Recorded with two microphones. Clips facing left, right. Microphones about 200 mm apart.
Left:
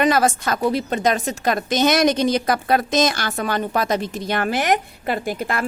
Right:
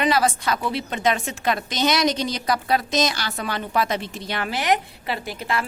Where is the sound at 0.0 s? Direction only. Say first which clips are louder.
Left 3 dB; 45° left (ahead or behind).